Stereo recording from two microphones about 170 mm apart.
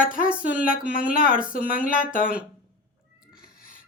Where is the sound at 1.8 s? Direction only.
50° left (ahead or behind).